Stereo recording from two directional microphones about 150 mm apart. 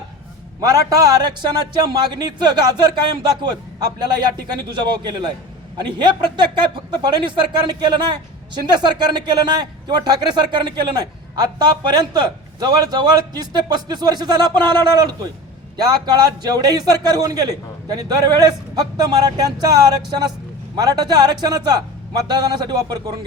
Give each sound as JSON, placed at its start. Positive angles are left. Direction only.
{"t": 0.6, "sound": "a man's voice", "side_deg": -25}